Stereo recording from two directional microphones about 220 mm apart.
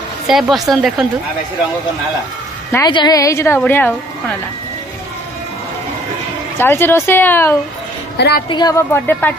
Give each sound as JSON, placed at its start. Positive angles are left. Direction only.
{"t": 0.3, "sound": "speech", "side_deg": 0}
{"t": 2.7, "sound": "a woman's voice", "side_deg": 20}
{"t": 6.6, "sound": "a woman's voice", "side_deg": 10}
{"t": 8.2, "sound": "a woman's voice", "side_deg": 45}
{"t": 8.5, "sound": "a woman's voice", "side_deg": 20}